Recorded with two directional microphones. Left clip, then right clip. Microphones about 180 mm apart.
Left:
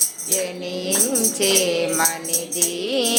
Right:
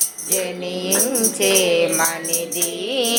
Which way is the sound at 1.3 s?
5° left (ahead or behind).